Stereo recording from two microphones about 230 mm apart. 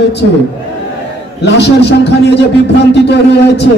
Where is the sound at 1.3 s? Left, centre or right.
Left.